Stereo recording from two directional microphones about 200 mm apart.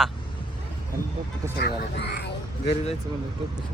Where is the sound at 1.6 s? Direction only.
50° left (ahead or behind).